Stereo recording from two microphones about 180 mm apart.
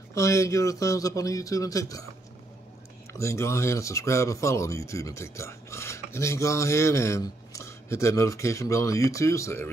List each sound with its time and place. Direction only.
0.1 s a man's voice: 15° left (ahead or behind)
3.1 s speech: 15° left (ahead or behind)